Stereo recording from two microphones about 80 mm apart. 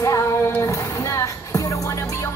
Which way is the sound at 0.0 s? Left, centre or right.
Left.